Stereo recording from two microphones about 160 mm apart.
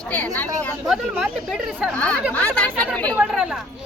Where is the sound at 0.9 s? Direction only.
5° right (ahead or behind).